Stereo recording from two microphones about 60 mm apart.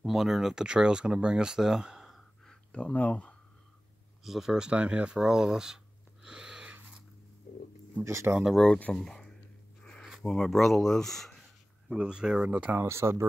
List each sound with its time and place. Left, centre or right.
0.0 s speech: centre
2.7 s speech: left
4.2 s speech: centre
6.2 s a sound: centre
8.0 s speech: right
8.9 s speech: centre
11.9 s speech: centre
12.8 s speech: right